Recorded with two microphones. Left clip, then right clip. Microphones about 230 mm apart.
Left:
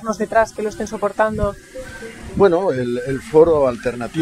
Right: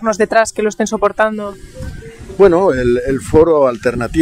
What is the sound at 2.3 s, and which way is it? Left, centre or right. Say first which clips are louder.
Speech: right 5 dB; right.